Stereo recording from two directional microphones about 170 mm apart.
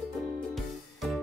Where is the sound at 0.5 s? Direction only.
Centre (ahead or behind).